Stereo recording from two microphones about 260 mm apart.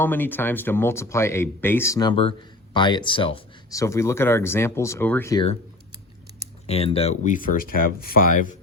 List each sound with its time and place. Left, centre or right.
0.0 s speech: centre
6.7 s speech: left